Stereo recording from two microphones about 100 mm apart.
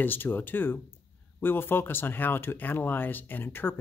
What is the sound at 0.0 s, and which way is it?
Speech, 20° left (ahead or behind).